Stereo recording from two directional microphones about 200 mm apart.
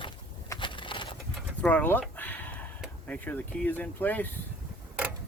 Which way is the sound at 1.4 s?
10° left (ahead or behind).